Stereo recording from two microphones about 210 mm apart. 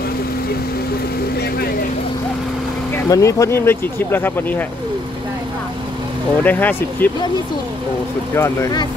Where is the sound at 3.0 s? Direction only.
15° left (ahead or behind).